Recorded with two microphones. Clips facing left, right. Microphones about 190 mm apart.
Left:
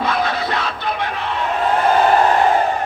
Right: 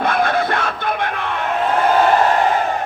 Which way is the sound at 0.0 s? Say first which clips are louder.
Right 3 dB; 55° right (ahead or behind).